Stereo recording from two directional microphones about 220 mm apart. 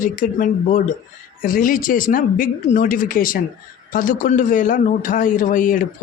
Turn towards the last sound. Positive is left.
turn(degrees=35)  # may be behind; listen again after turning